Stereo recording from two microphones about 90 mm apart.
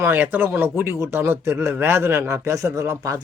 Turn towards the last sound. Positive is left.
turn(degrees=-35)  # may be behind; listen again after turning